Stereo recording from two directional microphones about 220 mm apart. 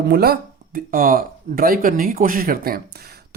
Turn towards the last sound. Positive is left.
turn(degrees=-45)  # may be behind; listen again after turning